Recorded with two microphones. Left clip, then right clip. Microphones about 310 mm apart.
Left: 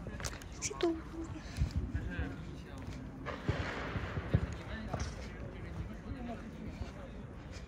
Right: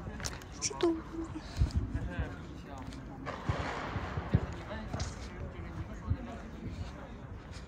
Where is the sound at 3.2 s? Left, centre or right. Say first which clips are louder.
Right 2 dB; right.